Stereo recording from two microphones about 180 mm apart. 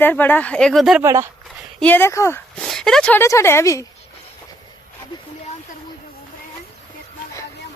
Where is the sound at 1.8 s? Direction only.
10° left (ahead or behind).